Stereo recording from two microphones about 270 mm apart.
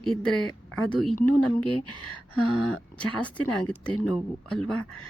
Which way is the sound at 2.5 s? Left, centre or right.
Centre.